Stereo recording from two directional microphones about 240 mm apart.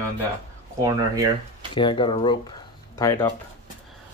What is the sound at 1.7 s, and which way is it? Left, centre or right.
Speech, centre.